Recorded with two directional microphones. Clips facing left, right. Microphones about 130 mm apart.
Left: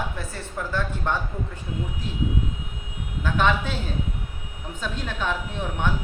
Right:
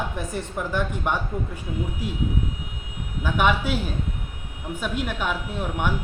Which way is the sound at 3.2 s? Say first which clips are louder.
Right 1 dB; 10° right (ahead or behind).